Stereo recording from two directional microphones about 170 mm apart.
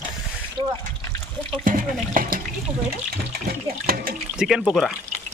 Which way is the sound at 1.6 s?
55° right (ahead or behind).